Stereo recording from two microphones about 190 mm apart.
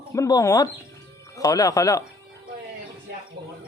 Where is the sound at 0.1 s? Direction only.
15° left (ahead or behind).